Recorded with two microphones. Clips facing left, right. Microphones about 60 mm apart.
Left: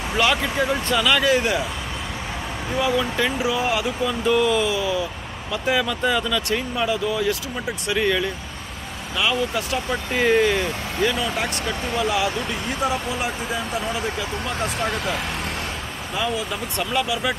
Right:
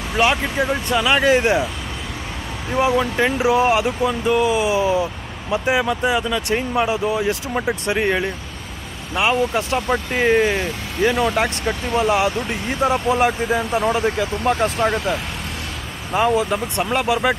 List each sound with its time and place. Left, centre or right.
0.2 s speech: right
2.8 s speech: right
4.7 s speech: right
11.1 s speech: right
16.1 s speech: right